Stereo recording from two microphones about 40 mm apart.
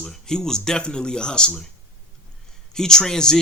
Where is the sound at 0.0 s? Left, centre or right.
Centre.